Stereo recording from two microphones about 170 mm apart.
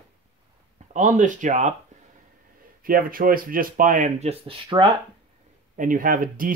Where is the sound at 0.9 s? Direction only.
50° right (ahead or behind).